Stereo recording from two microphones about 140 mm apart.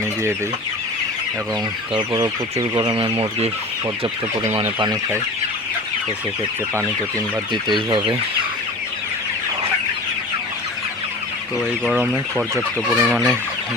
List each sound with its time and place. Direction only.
2.0 s speech: 25° right (ahead or behind)
2.9 s chicken: 40° right (ahead or behind)
7.5 s chicken: 35° right (ahead or behind)
11.9 s speech: 10° right (ahead or behind)
12.9 s fowl: centre (ahead or behind)